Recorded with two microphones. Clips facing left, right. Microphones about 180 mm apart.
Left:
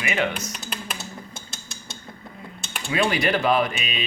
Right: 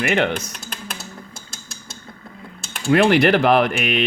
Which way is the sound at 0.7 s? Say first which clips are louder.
Right 2 dB; 5° left (ahead or behind).